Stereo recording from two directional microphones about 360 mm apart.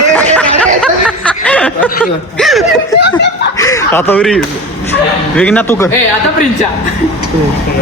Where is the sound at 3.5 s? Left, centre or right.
Centre.